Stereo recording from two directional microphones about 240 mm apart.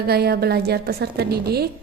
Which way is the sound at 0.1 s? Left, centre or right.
Right.